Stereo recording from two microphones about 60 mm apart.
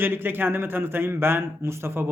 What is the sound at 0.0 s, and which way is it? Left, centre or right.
Speech, right.